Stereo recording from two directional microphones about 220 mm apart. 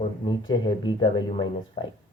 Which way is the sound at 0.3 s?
20° left (ahead or behind).